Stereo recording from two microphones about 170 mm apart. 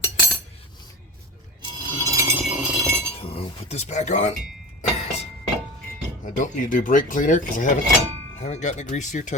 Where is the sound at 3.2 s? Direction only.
35° left (ahead or behind).